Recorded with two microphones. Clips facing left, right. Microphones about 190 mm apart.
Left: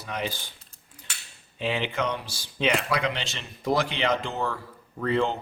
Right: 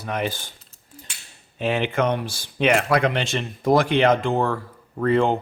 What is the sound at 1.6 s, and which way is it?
Speech, 50° right (ahead or behind).